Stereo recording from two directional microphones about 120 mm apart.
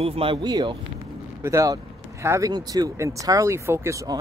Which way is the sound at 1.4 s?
25° right (ahead or behind).